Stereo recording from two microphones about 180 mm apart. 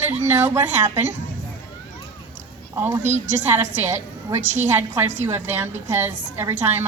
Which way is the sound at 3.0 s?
40° right (ahead or behind).